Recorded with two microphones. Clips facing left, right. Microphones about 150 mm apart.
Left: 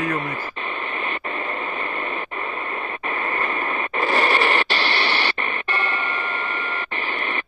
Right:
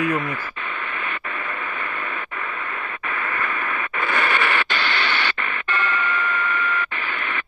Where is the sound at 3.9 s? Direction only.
35° left (ahead or behind).